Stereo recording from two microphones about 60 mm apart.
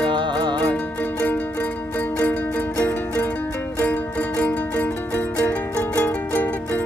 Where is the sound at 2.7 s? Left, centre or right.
Left.